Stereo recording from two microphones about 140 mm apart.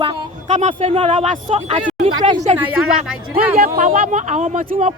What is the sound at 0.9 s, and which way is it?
Speech, 40° right (ahead or behind).